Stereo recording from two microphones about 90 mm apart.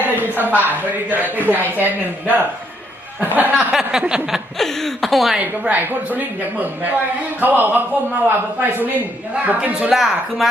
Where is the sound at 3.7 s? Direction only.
10° right (ahead or behind).